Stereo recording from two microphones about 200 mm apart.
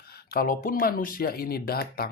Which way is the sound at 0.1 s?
50° left (ahead or behind).